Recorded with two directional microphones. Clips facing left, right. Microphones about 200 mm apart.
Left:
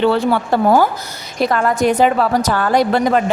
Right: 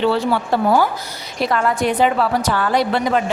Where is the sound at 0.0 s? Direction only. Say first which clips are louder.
Left 3 dB; 55° left (ahead or behind).